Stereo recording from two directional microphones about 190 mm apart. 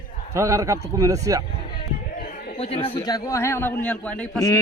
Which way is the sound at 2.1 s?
50° left (ahead or behind).